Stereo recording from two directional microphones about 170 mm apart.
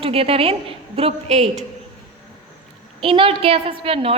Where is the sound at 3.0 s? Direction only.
30° right (ahead or behind).